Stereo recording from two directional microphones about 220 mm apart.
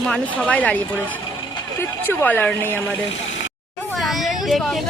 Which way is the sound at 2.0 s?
10° left (ahead or behind).